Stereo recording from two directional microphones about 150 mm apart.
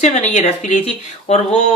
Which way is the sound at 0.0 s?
50° left (ahead or behind).